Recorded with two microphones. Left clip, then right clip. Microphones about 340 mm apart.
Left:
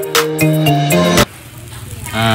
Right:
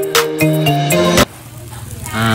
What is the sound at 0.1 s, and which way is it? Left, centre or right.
Music, centre.